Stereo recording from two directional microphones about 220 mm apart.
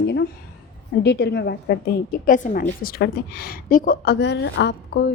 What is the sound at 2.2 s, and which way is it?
A woman's voice, 40° left (ahead or behind).